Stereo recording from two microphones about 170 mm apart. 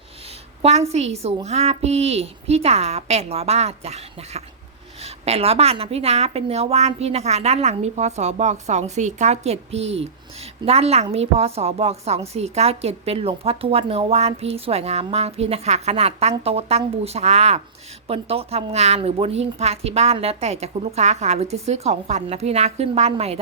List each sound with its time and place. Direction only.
0.6 s a woman's voice: 40° right (ahead or behind)